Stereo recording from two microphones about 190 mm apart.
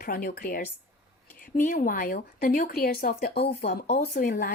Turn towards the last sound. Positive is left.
turn(degrees=50)  # may be behind; listen again after turning